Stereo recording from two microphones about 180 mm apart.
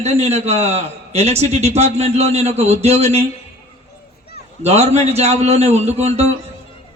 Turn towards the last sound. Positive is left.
turn(degrees=-35)  # may be behind; listen again after turning